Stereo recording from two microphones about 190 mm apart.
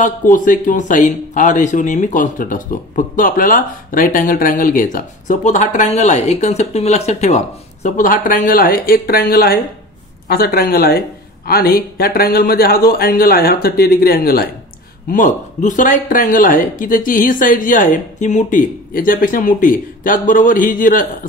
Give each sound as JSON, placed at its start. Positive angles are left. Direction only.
{"t": 0.0, "sound": "a man's voice", "side_deg": 45}